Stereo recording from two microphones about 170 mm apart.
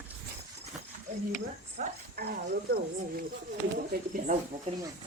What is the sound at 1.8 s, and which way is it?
Speech, 60° right (ahead or behind).